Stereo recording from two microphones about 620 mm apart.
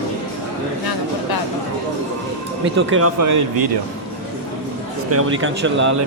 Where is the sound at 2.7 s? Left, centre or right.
Centre.